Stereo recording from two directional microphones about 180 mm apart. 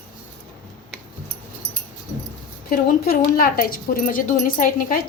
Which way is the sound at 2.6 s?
55° left (ahead or behind).